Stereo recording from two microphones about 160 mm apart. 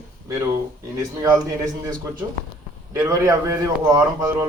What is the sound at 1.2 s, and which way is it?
Speech, 20° right (ahead or behind).